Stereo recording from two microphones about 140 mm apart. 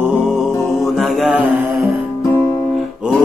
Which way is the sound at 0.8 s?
Centre (ahead or behind).